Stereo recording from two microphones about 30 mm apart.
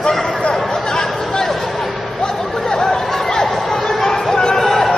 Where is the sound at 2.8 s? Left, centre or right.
Centre.